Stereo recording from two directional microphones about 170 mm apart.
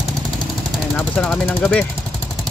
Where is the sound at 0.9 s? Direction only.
10° left (ahead or behind).